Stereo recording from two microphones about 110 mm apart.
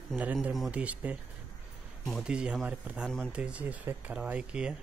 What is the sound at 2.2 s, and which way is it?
Speech, 10° right (ahead or behind).